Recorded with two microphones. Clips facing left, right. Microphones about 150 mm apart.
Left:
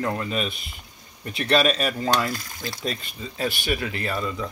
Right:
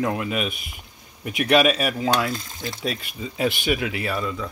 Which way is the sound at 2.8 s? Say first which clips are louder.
Right 3 dB; 5° right (ahead or behind).